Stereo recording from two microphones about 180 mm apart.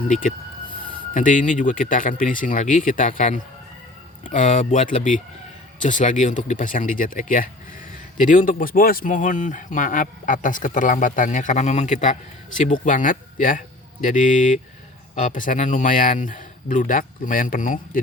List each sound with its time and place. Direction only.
0.1 s speech: 45° left (ahead or behind)